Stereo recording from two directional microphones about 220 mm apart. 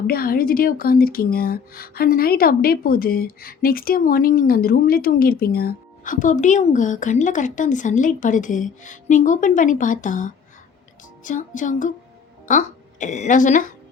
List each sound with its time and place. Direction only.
0.1 s a woman's voice: 40° left (ahead or behind)